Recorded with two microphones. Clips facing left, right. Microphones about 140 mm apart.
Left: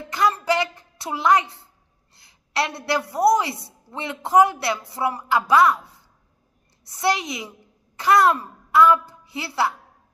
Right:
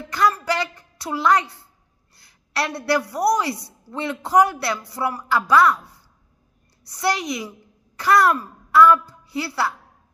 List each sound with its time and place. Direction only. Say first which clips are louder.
0.1 s a woman's voice: even; 20° left (ahead or behind)